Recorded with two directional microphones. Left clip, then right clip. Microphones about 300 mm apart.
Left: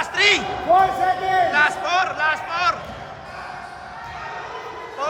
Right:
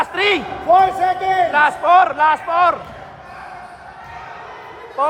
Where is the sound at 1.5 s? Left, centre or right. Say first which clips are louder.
Right 6 dB; centre.